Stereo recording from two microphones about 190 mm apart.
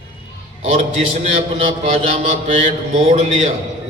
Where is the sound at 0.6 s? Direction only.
35° right (ahead or behind).